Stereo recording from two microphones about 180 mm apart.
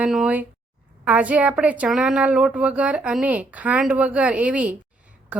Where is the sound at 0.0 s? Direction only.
5° right (ahead or behind).